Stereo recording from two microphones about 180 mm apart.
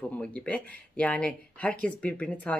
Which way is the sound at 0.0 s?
5° left (ahead or behind).